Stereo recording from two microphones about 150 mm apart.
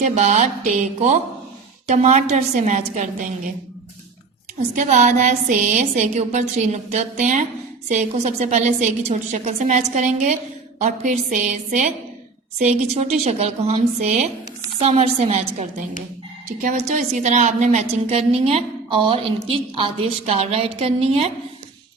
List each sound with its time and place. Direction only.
0.0 s a woman's voice: 55° right (ahead or behind)
4.7 s a woman's voice: 55° right (ahead or behind)
16.6 s a woman's voice: 55° right (ahead or behind)